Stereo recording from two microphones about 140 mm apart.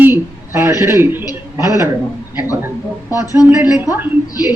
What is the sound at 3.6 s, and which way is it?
Speech, 15° right (ahead or behind).